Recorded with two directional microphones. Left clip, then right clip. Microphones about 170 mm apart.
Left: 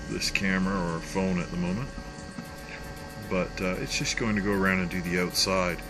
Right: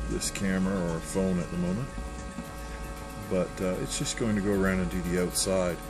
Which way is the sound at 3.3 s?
20° right (ahead or behind).